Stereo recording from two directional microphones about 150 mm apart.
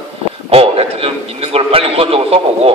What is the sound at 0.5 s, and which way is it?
A man's voice, 40° right (ahead or behind).